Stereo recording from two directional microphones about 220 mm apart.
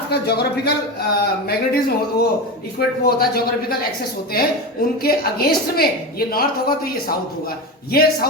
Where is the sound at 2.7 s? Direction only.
45° left (ahead or behind).